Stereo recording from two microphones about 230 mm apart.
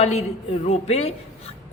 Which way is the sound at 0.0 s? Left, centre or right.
Left.